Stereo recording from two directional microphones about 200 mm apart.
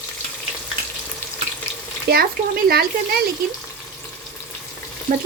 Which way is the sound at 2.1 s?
50° right (ahead or behind).